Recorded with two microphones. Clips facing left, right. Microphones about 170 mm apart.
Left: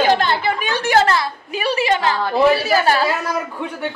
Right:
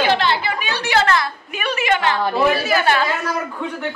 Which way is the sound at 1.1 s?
30° left (ahead or behind).